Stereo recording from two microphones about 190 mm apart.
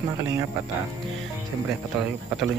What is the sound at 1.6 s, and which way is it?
Speech, centre (ahead or behind).